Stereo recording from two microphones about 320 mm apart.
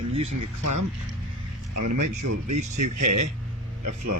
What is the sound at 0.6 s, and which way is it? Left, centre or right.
Speech, right.